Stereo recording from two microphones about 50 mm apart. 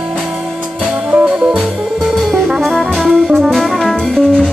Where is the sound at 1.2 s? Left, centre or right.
Right.